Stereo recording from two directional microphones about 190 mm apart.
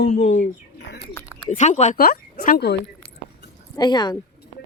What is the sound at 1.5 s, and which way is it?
Speech, 40° left (ahead or behind).